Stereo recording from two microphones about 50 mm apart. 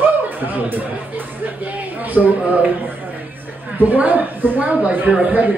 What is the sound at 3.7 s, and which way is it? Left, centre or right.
A man's voice, right.